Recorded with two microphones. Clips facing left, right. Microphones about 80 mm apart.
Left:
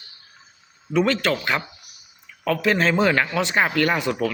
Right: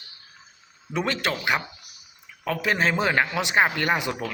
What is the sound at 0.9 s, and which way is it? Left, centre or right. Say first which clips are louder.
Speech: left 6 dB; centre.